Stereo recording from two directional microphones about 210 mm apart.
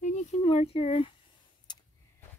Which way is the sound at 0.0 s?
30° left (ahead or behind).